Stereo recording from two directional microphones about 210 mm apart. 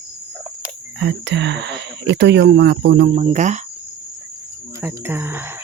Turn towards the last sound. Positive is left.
turn(degrees=-10)  # may be behind; listen again after turning